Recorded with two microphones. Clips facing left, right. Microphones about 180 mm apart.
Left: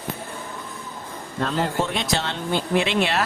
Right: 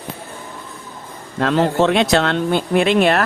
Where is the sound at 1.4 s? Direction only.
80° right; by 3.2 s 55° right (ahead or behind).